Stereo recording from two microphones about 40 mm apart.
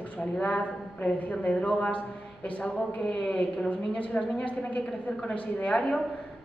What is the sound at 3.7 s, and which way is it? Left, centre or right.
A woman's voice, left.